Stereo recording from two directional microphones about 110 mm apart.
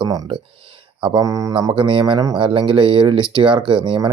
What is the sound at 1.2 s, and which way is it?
Speech, 30° right (ahead or behind).